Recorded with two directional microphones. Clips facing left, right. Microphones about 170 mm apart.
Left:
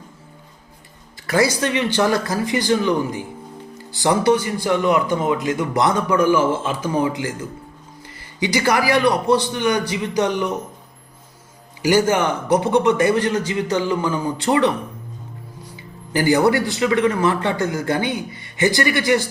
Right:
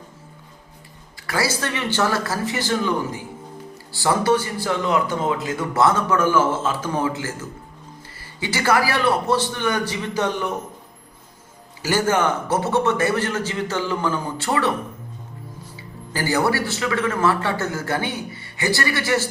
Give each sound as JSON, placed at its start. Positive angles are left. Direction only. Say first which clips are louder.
{"t": 1.3, "sound": "speech", "louder": "left 6 dB", "side_deg": 20}
{"t": 3.9, "sound": "speech", "louder": "left 2 dB", "side_deg": 20}
{"t": 8.4, "sound": "speech", "louder": "left 2 dB", "side_deg": 15}
{"t": 11.8, "sound": "speech", "louder": "left 3 dB", "side_deg": 15}
{"t": 16.1, "sound": "a man's voice", "louder": "left 5 dB", "side_deg": 20}